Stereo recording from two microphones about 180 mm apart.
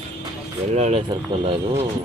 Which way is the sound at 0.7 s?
40° right (ahead or behind).